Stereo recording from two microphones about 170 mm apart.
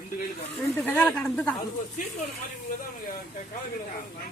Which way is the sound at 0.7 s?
10° left (ahead or behind).